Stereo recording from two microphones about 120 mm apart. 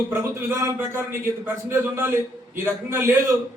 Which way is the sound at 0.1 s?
25° right (ahead or behind).